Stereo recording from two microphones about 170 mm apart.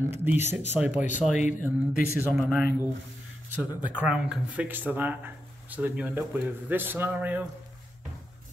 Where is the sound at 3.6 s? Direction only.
10° right (ahead or behind).